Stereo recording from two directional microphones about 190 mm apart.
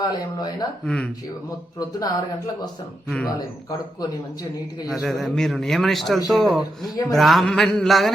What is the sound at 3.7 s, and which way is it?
Speech, 20° left (ahead or behind).